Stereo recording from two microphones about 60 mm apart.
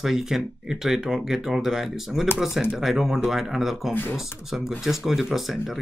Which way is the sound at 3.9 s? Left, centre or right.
Left.